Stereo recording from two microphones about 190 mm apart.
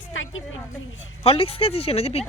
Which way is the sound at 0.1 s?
90° left.